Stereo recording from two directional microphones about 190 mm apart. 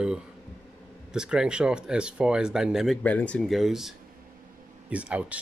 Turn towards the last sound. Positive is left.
turn(degrees=-5)  # may be behind; listen again after turning